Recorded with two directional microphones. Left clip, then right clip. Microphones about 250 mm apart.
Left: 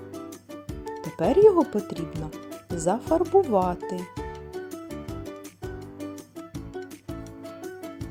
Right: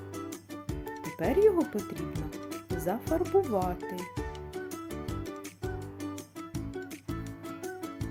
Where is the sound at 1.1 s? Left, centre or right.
Left.